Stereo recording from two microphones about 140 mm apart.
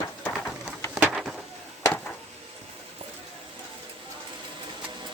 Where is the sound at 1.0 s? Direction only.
Centre (ahead or behind).